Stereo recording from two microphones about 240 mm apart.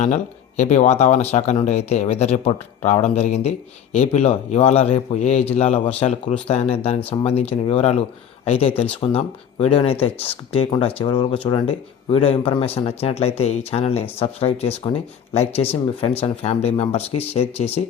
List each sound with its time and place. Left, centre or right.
0.0 s speech: left